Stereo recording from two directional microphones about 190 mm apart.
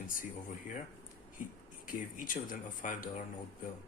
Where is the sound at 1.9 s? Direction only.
45° left (ahead or behind).